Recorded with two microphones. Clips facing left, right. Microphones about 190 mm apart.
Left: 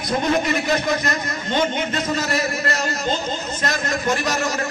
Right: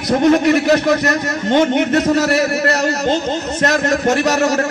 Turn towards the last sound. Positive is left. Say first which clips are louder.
# right 8 dB
turn(degrees=-75)  # may be behind; listen again after turning